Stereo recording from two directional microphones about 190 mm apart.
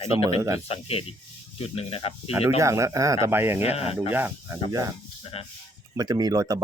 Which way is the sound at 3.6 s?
30° left (ahead or behind).